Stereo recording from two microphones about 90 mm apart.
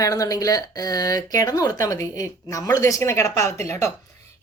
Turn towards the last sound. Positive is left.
turn(degrees=35)  # may be behind; listen again after turning